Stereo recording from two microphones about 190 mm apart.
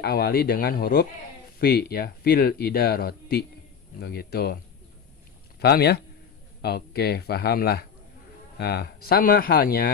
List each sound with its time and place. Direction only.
0.0 s speech: 55° left (ahead or behind)
5.6 s speech: 60° left (ahead or behind)